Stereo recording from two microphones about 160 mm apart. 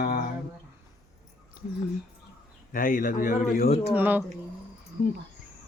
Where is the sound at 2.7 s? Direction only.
60° left (ahead or behind).